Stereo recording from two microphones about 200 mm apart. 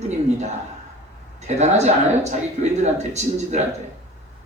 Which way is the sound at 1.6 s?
35° right (ahead or behind).